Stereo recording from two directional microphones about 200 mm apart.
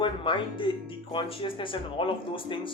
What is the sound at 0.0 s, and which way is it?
Speech, 25° left (ahead or behind).